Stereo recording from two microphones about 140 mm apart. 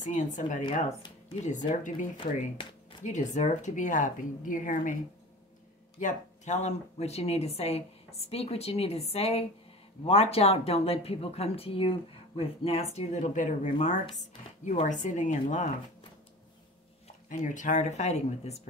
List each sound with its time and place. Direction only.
0.0 s speech: 60° left (ahead or behind)
5.9 s speech: 60° left (ahead or behind)
17.3 s speech: 65° left (ahead or behind)